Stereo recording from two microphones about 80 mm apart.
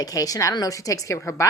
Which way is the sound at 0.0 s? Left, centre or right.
Left.